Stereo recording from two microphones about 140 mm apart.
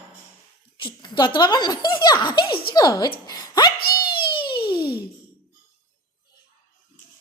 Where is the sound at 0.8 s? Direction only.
35° left (ahead or behind).